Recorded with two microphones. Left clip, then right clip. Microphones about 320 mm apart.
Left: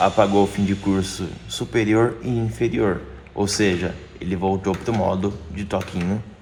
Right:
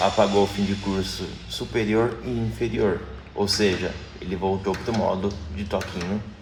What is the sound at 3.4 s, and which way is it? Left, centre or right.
Speech, left.